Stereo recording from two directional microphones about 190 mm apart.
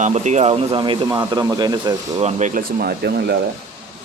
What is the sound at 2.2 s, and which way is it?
Speech, 40° right (ahead or behind).